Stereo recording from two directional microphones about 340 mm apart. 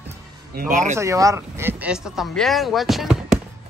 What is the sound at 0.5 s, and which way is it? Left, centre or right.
Speech, right.